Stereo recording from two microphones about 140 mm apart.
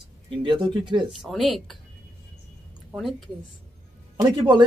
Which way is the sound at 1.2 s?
Centre (ahead or behind).